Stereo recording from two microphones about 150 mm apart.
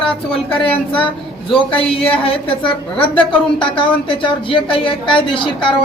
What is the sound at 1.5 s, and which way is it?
Speech, 40° left (ahead or behind).